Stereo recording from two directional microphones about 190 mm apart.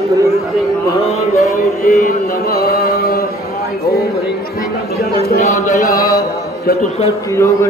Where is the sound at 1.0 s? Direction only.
35° left (ahead or behind); by 3.3 s 50° left (ahead or behind).